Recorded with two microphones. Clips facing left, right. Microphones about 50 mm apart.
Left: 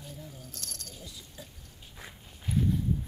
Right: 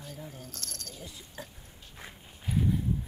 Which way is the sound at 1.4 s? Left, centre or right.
Right.